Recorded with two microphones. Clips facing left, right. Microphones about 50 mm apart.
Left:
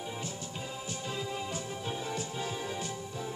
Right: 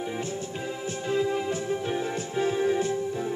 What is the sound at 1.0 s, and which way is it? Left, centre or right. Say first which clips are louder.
Music: right 12 dB; right.